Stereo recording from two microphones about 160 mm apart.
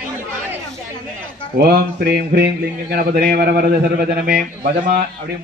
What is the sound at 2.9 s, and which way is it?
A man's voice, 70° right (ahead or behind).